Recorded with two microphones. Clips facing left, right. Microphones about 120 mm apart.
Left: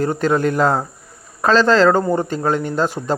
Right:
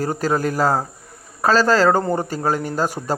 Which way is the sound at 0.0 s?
40° right (ahead or behind).